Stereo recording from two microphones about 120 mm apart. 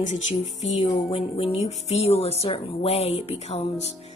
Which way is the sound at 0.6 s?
60° left (ahead or behind).